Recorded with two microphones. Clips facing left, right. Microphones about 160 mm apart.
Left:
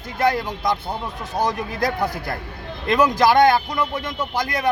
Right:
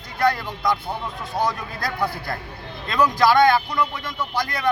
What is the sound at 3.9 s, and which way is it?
Speech, 45° left (ahead or behind).